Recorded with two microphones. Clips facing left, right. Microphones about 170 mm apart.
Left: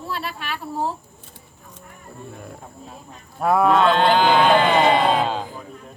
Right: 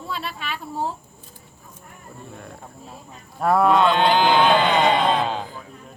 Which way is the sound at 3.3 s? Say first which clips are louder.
Even; centre (ahead or behind).